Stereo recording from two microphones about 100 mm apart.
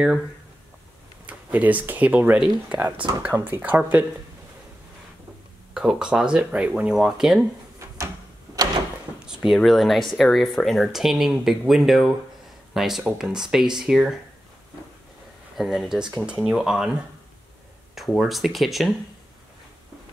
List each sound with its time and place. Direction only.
1.2 s speech: 15° right (ahead or behind)
5.8 s speech: 5° right (ahead or behind)
9.2 s a sound: 5° right (ahead or behind)
9.6 s speech: centre (ahead or behind)
15.5 s speech: centre (ahead or behind)